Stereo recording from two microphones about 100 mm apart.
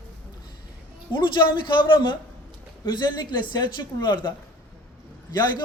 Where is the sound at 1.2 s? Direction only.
50° left (ahead or behind).